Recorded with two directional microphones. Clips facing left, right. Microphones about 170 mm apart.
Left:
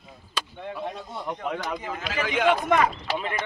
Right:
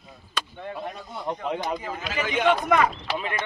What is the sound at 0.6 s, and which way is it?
Speech, 25° left (ahead or behind).